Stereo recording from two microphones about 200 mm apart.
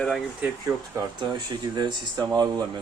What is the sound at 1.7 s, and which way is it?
Speech, 20° right (ahead or behind).